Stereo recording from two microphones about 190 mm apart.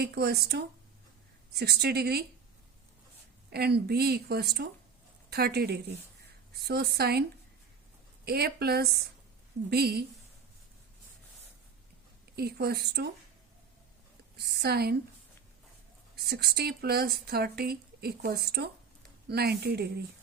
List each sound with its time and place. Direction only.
0.0 s speech: 55° right (ahead or behind)
3.5 s speech: 55° right (ahead or behind)
12.4 s speech: 55° right (ahead or behind)
14.3 s speech: 60° right (ahead or behind)
16.2 s speech: 60° right (ahead or behind)